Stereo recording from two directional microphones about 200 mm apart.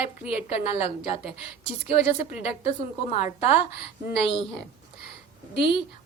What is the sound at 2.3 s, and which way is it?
Speech, 30° left (ahead or behind).